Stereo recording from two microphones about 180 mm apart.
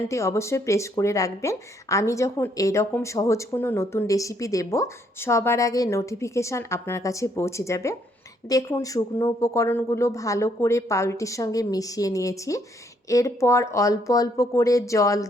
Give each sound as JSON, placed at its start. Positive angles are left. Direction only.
{"t": 0.1, "sound": "a woman's voice", "side_deg": 15}